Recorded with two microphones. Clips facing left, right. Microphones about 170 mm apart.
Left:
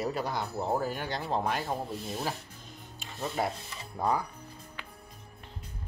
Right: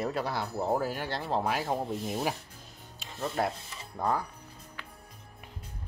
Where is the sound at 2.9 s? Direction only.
5° left (ahead or behind).